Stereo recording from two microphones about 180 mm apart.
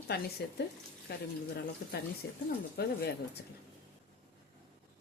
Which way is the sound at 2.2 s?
60° left (ahead or behind).